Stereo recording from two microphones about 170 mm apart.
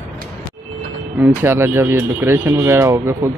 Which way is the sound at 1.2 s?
15° right (ahead or behind).